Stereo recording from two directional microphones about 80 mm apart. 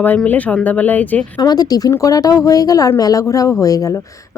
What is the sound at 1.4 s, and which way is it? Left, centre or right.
Speech, left.